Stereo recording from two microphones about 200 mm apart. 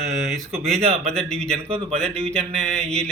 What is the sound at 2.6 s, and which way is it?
Mantra, 35° right (ahead or behind).